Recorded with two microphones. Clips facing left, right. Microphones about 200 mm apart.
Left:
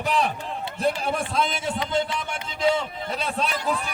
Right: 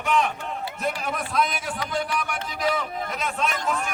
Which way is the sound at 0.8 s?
30° left (ahead or behind).